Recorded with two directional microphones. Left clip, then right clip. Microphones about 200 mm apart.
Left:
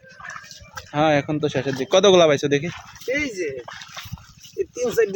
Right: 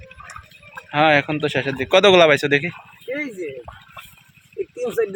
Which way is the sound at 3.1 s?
15° left (ahead or behind).